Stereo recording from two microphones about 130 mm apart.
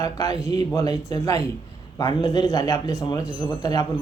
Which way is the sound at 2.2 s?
40° left (ahead or behind).